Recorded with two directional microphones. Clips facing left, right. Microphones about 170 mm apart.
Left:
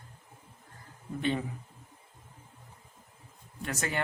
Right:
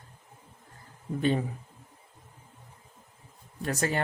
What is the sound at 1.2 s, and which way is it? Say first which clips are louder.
Speech: right 4 dB; 40° right (ahead or behind).